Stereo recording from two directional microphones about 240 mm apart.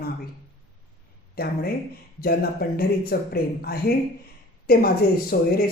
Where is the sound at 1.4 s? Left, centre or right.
Left.